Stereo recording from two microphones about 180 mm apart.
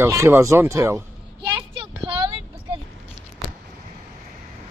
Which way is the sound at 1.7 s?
30° right (ahead or behind).